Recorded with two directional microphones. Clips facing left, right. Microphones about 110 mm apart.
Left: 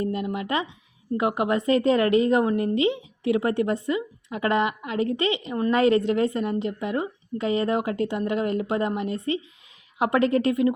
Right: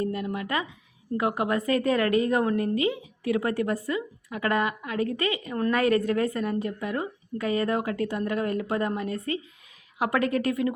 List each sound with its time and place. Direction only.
0.0 s a woman's voice: 25° left (ahead or behind)